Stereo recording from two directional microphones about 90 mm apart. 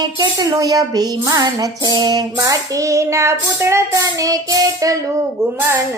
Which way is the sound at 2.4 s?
35° right (ahead or behind).